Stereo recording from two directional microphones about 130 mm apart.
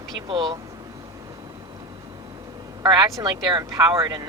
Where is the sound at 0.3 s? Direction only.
40° right (ahead or behind).